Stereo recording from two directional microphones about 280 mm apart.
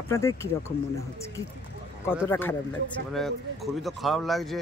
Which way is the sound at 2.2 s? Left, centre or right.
Centre.